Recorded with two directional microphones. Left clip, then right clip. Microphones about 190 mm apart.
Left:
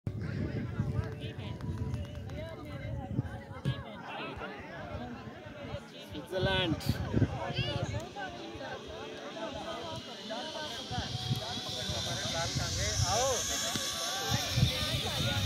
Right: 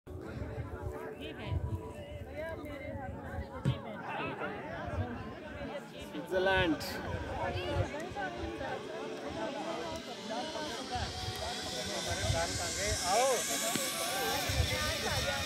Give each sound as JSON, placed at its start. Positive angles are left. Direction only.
{"t": 6.3, "sound": "speech", "side_deg": 0}
{"t": 10.3, "sound": "hiss", "side_deg": -20}
{"t": 11.5, "sound": "vehicle", "side_deg": 0}
{"t": 11.8, "sound": "a sound", "side_deg": -35}
{"t": 13.2, "sound": "a sound", "side_deg": -25}
{"t": 14.8, "sound": "music", "side_deg": 5}